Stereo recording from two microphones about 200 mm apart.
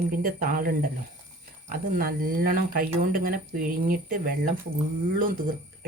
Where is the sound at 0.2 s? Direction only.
45° right (ahead or behind).